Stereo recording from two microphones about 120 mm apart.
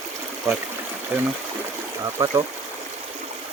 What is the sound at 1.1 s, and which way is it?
Speech, 20° right (ahead or behind).